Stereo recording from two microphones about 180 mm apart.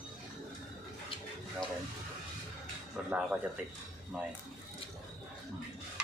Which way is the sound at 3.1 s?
5° right (ahead or behind).